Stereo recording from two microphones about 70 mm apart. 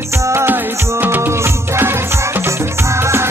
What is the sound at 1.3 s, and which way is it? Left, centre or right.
Music, right.